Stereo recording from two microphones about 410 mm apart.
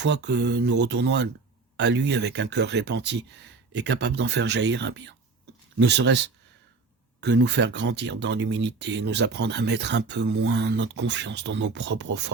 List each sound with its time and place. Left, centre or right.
0.0 s speech: right